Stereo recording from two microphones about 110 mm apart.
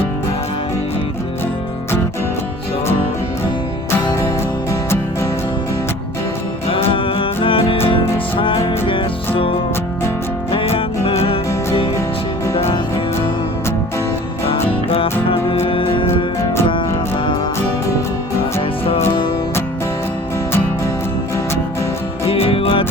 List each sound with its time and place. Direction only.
4.7 s music: 25° left (ahead or behind)
6.9 s music: 55° left (ahead or behind)
14.8 s music: 60° left (ahead or behind)
16.4 s music: 25° left (ahead or behind)
22.3 s music: 60° left (ahead or behind)